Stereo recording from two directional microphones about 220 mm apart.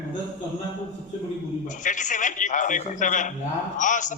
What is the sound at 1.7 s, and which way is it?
A man's voice, 35° left (ahead or behind).